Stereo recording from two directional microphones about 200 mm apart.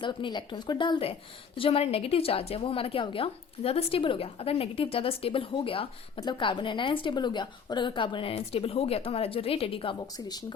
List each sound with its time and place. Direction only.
0.0 s a woman's voice: 25° left (ahead or behind)